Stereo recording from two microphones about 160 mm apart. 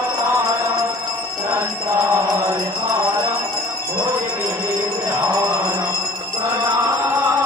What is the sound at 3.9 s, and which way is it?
Music, 15° right (ahead or behind).